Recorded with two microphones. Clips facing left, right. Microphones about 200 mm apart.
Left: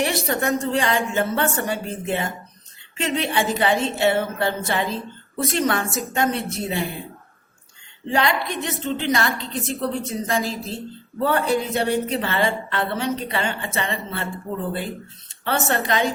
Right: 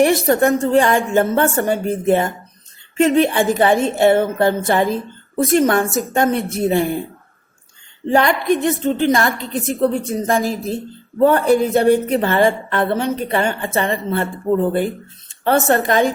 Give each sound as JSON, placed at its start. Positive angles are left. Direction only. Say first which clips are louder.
{"t": 0.0, "sound": "a woman's voice", "louder": "right 9 dB", "side_deg": -50}
{"t": 8.1, "sound": "a woman's voice", "louder": "right 7 dB", "side_deg": -50}
{"t": 15.4, "sound": "a woman's voice", "louder": "right 7 dB", "side_deg": -50}